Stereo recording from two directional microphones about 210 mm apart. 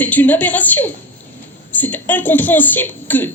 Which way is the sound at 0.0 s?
10° left (ahead or behind).